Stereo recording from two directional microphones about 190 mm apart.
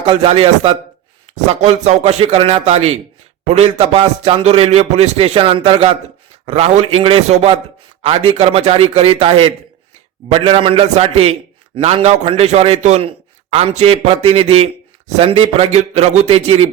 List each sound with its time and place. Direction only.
0.0 s a man's voice: 30° right (ahead or behind)